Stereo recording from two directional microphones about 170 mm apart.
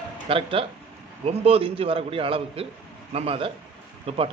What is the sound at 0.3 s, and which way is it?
A man's voice, 35° right (ahead or behind).